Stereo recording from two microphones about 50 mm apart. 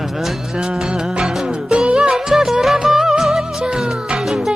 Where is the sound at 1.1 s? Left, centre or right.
Centre.